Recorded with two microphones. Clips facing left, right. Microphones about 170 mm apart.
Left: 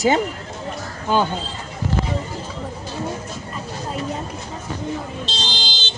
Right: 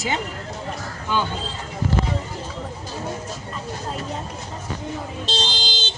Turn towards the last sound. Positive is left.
turn(degrees=-45)  # may be behind; listen again after turning